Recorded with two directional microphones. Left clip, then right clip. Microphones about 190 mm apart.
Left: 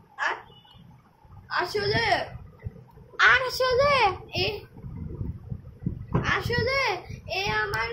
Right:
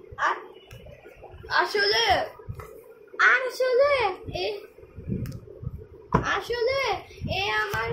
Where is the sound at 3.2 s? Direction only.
55° left (ahead or behind).